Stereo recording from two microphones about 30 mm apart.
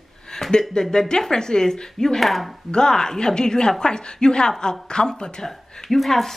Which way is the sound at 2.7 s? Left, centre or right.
Left.